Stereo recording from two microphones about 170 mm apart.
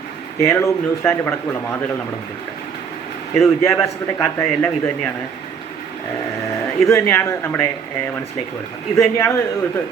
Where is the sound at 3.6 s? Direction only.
15° left (ahead or behind).